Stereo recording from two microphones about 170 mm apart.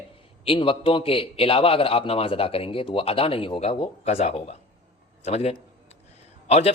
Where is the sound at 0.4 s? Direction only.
30° left (ahead or behind).